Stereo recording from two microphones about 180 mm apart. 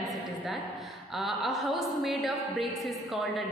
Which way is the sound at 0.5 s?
Centre (ahead or behind).